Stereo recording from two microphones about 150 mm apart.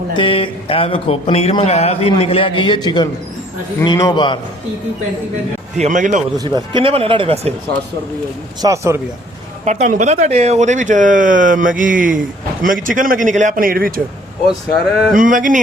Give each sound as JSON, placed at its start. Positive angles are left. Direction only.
{"t": 0.2, "sound": "speech", "side_deg": 35}
{"t": 5.7, "sound": "speech", "side_deg": -55}
{"t": 6.4, "sound": "speech", "side_deg": -30}
{"t": 8.6, "sound": "speech", "side_deg": -20}
{"t": 9.6, "sound": "speech", "side_deg": -50}
{"t": 15.1, "sound": "speech", "side_deg": -65}